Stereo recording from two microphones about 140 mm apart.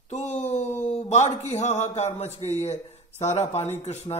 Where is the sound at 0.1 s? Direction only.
55° left (ahead or behind).